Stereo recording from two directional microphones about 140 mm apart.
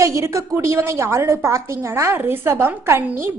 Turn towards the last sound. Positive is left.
turn(degrees=-20)  # may be behind; listen again after turning